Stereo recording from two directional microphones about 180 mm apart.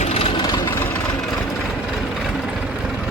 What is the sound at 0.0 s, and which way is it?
Vehicle, 35° left (ahead or behind).